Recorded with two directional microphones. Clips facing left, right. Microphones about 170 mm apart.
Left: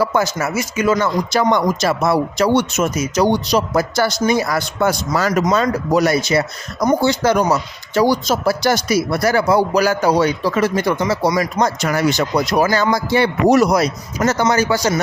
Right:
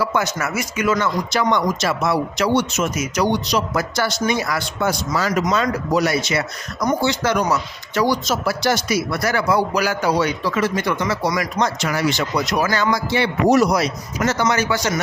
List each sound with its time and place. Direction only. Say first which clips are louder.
0.0 s speech: left 4 dB; 45° left (ahead or behind)
0.3 s speech: left 3 dB; 25° left (ahead or behind)
2.6 s speech: left 3 dB; 50° left (ahead or behind)
2.9 s speech: left 4 dB; 30° left (ahead or behind)
11.0 s speech: left 4 dB; 25° left (ahead or behind)
11.5 s speech: left 3 dB; 45° left (ahead or behind)
12.3 s speech: left 4 dB; 30° left (ahead or behind)
13.5 s speech: left 1 dB; 55° left (ahead or behind); by 15.0 s 35° left (ahead or behind)